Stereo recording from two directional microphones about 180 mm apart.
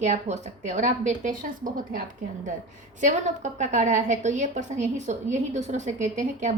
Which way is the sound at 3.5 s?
45° right (ahead or behind).